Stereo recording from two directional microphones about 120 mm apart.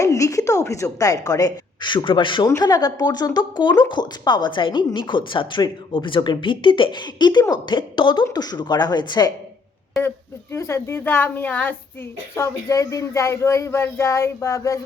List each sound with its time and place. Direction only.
0.0 s a woman's voice: 25° left (ahead or behind); by 2.5 s 40° left (ahead or behind)
2.5 s speech: 30° left (ahead or behind)
10.5 s a woman's voice: 20° left (ahead or behind)